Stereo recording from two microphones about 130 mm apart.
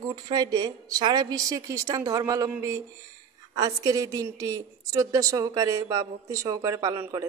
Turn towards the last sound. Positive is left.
turn(degrees=-20)  # may be behind; listen again after turning